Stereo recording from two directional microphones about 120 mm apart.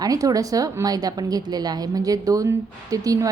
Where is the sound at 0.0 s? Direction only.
30° right (ahead or behind).